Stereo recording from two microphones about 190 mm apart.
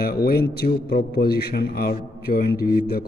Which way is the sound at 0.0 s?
55° left (ahead or behind).